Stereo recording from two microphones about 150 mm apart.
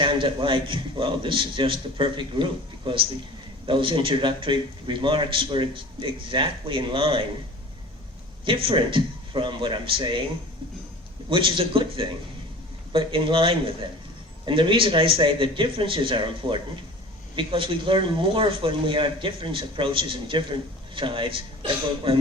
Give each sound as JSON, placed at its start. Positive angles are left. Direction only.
{"t": 0.0, "sound": "speech", "side_deg": -35}
{"t": 8.4, "sound": "speech", "side_deg": -35}
{"t": 11.3, "sound": "speech", "side_deg": -35}